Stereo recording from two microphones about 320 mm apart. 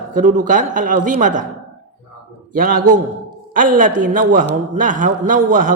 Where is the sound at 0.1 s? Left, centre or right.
Right.